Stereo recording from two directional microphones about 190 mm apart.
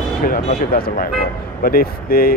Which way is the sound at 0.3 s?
50° left (ahead or behind).